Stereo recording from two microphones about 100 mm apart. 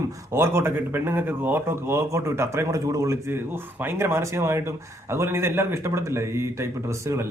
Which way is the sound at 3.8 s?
25° right (ahead or behind).